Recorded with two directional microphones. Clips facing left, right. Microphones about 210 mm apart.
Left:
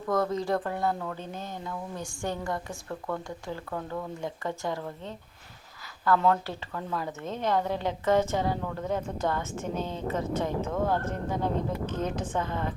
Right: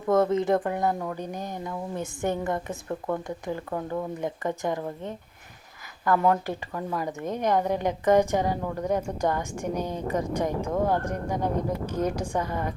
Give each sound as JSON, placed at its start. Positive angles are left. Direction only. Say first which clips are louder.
{"t": 0.1, "sound": "a woman's voice", "louder": "right 5 dB", "side_deg": -20}